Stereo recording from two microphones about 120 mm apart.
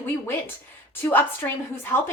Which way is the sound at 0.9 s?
15° left (ahead or behind).